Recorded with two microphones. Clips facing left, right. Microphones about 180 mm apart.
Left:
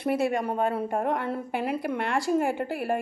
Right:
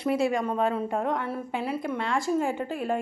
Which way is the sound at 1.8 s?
65° left (ahead or behind).